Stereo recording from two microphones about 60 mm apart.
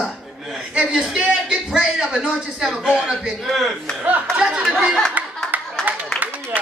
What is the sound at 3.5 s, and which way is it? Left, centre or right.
Speech, centre.